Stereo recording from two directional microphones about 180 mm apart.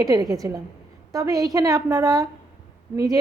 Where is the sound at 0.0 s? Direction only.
20° right (ahead or behind).